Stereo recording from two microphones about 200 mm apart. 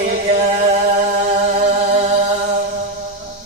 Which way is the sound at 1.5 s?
35° right (ahead or behind).